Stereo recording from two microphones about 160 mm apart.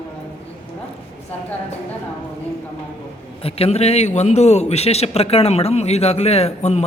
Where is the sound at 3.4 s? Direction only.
40° left (ahead or behind).